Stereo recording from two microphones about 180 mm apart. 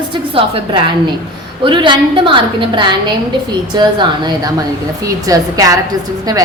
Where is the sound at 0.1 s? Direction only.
30° right (ahead or behind).